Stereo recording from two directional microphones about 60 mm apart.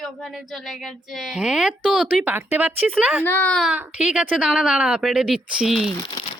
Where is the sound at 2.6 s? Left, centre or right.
Right.